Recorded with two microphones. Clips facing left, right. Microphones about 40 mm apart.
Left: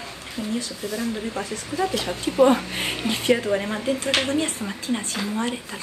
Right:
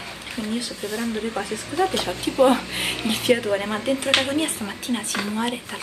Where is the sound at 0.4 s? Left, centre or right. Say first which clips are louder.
Even; right.